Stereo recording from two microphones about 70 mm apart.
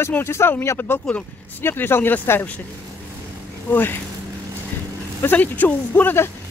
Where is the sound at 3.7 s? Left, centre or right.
Left.